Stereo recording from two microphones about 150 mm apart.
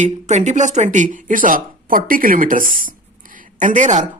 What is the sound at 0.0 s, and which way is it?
A man's voice, 50° right (ahead or behind).